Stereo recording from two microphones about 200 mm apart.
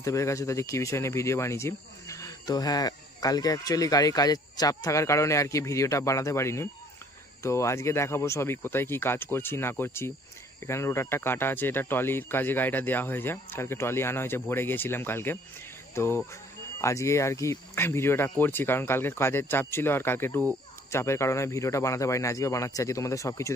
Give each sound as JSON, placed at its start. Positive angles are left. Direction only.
{"t": 0.0, "sound": "speech", "side_deg": 15}